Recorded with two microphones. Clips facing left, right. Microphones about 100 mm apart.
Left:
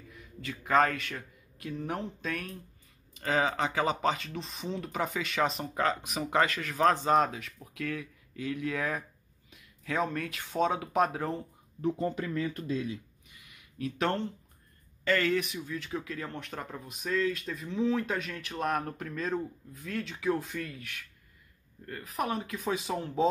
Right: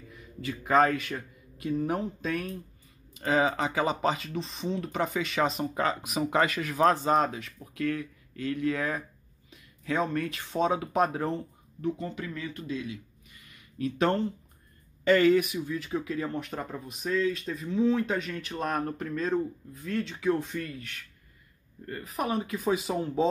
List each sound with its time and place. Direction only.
0.1 s a man's voice: centre (ahead or behind)
12.0 s speech: 35° left (ahead or behind)
13.3 s a sound: 15° left (ahead or behind)
13.7 s speech: centre (ahead or behind)
15.0 s speech: 15° right (ahead or behind)